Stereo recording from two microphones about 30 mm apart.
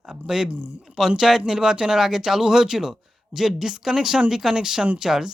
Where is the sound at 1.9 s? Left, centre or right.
Centre.